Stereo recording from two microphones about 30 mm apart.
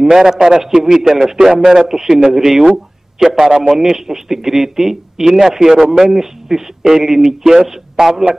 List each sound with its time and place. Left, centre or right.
0.0 s a man's voice: centre